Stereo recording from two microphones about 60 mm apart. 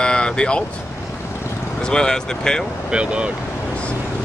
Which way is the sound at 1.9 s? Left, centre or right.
Centre.